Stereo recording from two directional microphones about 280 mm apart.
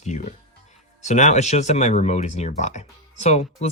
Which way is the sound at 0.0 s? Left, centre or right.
Left.